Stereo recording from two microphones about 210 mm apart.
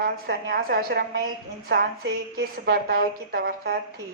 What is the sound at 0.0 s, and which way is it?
A woman's voice, 50° right (ahead or behind).